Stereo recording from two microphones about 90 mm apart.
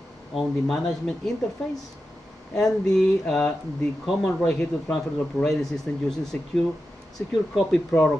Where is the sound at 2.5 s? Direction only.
5° left (ahead or behind).